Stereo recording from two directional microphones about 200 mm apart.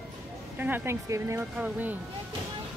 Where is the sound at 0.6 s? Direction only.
10° right (ahead or behind).